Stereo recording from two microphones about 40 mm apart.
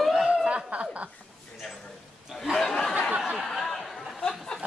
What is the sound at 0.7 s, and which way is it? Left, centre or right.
Speech, right.